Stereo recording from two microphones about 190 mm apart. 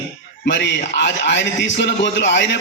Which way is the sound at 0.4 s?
65° left (ahead or behind).